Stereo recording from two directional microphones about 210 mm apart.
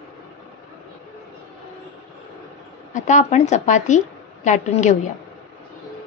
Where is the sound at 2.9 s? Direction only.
35° left (ahead or behind).